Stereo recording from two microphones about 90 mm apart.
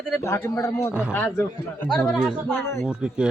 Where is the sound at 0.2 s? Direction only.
30° left (ahead or behind).